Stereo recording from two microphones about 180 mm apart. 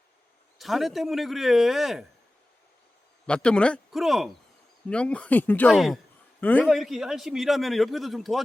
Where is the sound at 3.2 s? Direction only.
5° left (ahead or behind).